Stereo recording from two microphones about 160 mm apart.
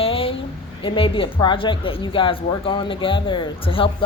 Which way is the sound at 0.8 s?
35° left (ahead or behind).